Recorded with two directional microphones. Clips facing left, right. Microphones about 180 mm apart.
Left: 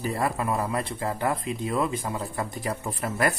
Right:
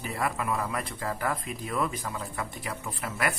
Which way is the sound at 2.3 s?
35° left (ahead or behind).